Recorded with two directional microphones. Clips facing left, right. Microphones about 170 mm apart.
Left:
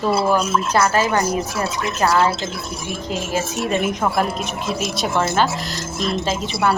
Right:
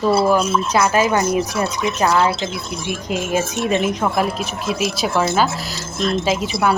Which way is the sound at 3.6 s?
5° left (ahead or behind).